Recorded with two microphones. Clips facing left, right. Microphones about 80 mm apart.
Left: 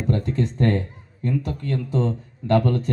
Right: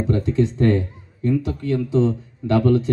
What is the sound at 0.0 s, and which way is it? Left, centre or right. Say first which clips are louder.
Speech: right 4 dB; left.